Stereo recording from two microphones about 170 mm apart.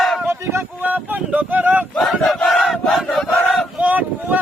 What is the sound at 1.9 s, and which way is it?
Battle cry, 5° left (ahead or behind).